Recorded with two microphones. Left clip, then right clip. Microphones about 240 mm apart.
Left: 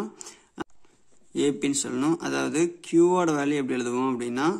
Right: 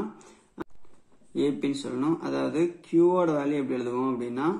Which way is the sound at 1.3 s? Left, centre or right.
Left.